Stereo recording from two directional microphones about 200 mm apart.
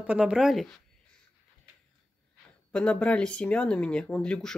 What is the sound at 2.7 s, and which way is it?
Speech, 5° left (ahead or behind).